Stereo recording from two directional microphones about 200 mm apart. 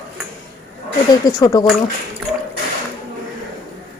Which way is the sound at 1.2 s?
20° left (ahead or behind).